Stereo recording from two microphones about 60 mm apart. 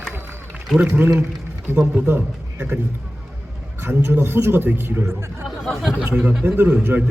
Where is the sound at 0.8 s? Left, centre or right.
Right.